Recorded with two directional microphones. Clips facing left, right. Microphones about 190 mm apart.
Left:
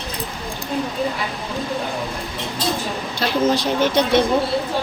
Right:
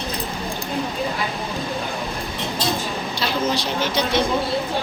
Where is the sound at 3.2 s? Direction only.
55° left (ahead or behind).